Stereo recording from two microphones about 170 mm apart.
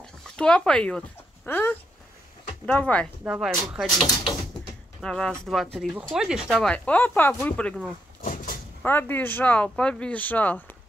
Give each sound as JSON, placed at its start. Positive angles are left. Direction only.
{"t": 0.4, "sound": "speech", "side_deg": 5}
{"t": 3.3, "sound": "speech", "side_deg": -5}
{"t": 5.0, "sound": "speech", "side_deg": 5}
{"t": 6.7, "sound": "speech", "side_deg": 10}
{"t": 8.2, "sound": "a sound", "side_deg": 55}
{"t": 8.8, "sound": "speech", "side_deg": 10}